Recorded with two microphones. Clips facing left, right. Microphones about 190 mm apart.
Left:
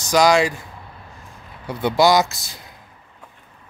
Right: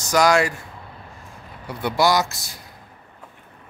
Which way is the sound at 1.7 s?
20° left (ahead or behind).